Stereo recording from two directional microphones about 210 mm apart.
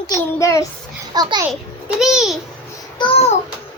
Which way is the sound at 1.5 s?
Centre (ahead or behind).